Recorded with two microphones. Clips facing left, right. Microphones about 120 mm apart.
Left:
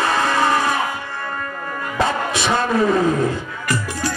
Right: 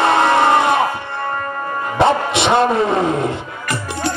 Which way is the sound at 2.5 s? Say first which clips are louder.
Right 2 dB; 25° right (ahead or behind).